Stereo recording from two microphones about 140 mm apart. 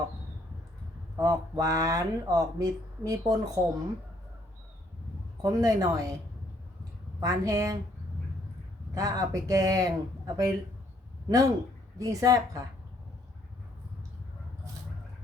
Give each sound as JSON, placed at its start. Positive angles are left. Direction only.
{"t": 1.1, "sound": "speech", "side_deg": -25}
{"t": 5.4, "sound": "speech", "side_deg": -25}
{"t": 7.2, "sound": "speech", "side_deg": -25}
{"t": 9.0, "sound": "speech", "side_deg": -25}